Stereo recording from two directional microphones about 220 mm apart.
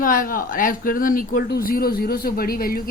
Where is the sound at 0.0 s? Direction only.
40° left (ahead or behind).